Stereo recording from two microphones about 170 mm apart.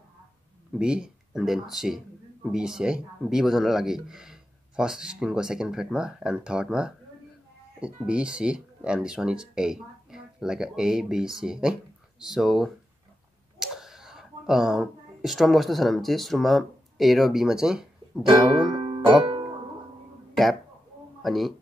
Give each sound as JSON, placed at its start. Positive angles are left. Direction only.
{"t": 0.7, "sound": "speech", "side_deg": -5}
{"t": 18.2, "sound": "music", "side_deg": -30}
{"t": 21.2, "sound": "speech", "side_deg": 0}